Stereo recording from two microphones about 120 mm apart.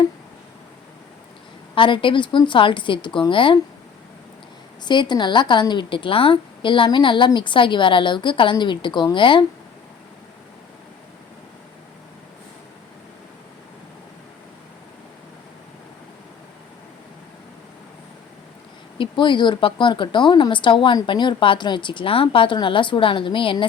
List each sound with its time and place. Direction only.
1.7 s speech: 45° left (ahead or behind)
4.9 s a woman's voice: 40° left (ahead or behind)
18.9 s speech: 40° left (ahead or behind)